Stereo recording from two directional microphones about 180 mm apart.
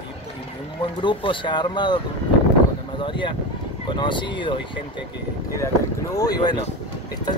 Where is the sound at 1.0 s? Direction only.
25° left (ahead or behind).